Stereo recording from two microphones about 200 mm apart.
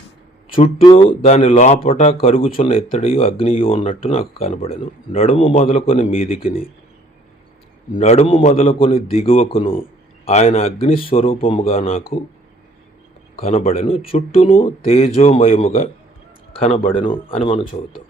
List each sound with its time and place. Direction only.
0.5 s speech: 25° left (ahead or behind)
7.9 s speech: 35° left (ahead or behind)
13.3 s speech: 30° left (ahead or behind)